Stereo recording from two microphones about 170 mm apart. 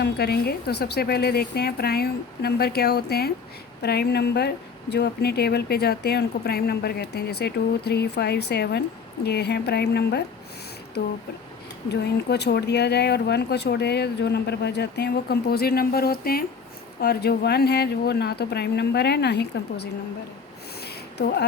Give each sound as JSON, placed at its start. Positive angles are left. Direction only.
{"t": 0.0, "sound": "speech", "side_deg": 70}
{"t": 11.9, "sound": "speech", "side_deg": 80}
{"t": 20.8, "sound": "a sound", "side_deg": 70}